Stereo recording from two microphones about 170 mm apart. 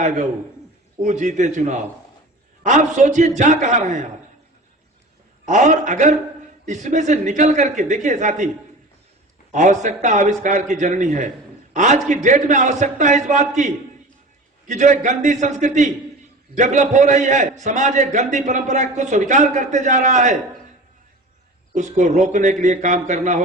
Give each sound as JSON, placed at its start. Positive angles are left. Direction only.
{"t": 1.0, "sound": "a man's voice", "side_deg": -45}
{"t": 5.5, "sound": "a man's voice", "side_deg": -45}
{"t": 9.5, "sound": "a man's voice", "side_deg": -45}
{"t": 21.8, "sound": "a man's voice", "side_deg": -45}